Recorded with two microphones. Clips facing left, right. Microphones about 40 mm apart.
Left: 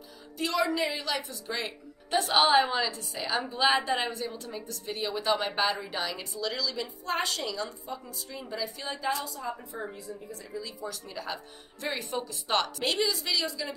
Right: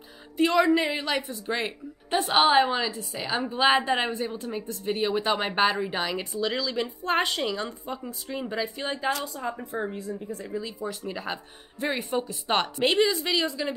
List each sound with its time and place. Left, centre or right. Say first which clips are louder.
0.7 s speech: right 6 dB; right
2.3 s a woman's voice: right 3 dB; centre
3.4 s speech: right 4 dB; right
10.6 s speech: right 5 dB; right